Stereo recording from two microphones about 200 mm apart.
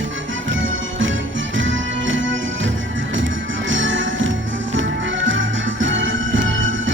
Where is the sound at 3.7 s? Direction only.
70° right (ahead or behind).